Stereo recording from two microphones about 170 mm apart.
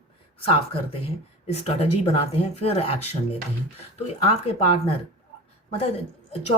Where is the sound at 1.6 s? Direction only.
35° left (ahead or behind).